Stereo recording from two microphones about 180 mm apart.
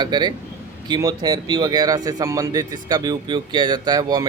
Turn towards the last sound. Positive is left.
turn(degrees=-20)  # may be behind; listen again after turning